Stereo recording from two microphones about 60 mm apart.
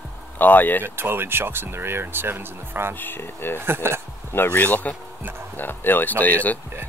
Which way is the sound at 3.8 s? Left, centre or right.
Right.